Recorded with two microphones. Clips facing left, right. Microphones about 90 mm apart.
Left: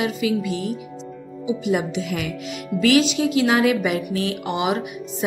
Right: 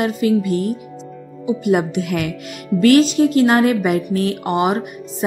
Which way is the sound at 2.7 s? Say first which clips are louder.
Right 6 dB; 45° right (ahead or behind).